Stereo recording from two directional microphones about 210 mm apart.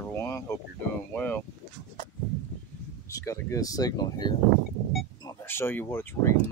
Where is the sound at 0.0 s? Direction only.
10° left (ahead or behind).